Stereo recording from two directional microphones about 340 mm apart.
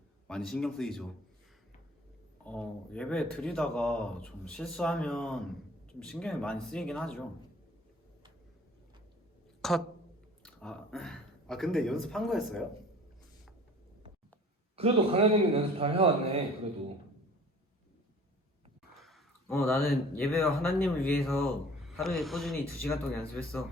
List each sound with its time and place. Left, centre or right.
0.3 s speech: centre
2.4 s speech: centre
9.6 s a sound: centre
10.4 s speech: centre
14.8 s a man's voice: centre
18.9 s speech: centre